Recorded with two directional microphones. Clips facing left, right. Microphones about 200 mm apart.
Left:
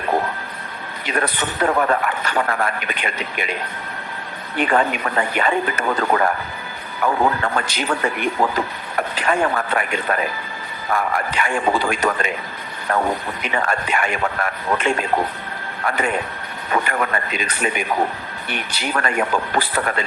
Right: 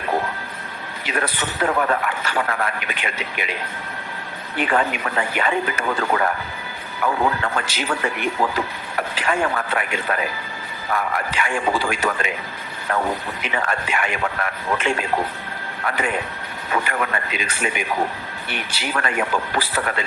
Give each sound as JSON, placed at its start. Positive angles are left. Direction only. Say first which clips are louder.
{"t": 1.0, "sound": "a man's voice", "louder": "left 2 dB", "side_deg": 45}
{"t": 4.6, "sound": "a man's voice", "louder": "left 2 dB", "side_deg": 40}
{"t": 18.7, "sound": "speech", "louder": "left 3 dB", "side_deg": -5}
{"t": 18.9, "sound": "a man's voice", "louder": "left 2 dB", "side_deg": 40}